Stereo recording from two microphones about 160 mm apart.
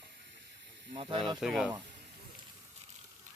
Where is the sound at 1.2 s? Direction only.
Centre (ahead or behind).